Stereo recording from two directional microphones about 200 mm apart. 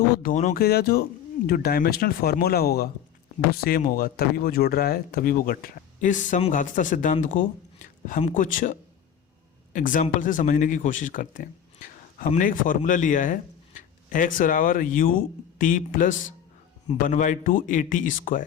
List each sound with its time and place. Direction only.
0.1 s speech: 45° left (ahead or behind)
0.6 s speech: 50° left (ahead or behind)
9.7 s speech: 40° left (ahead or behind)